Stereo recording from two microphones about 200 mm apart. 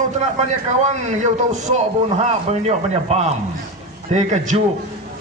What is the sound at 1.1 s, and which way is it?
A man's voice, 35° right (ahead or behind).